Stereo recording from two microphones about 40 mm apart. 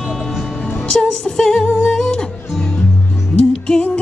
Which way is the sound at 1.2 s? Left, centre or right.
Centre.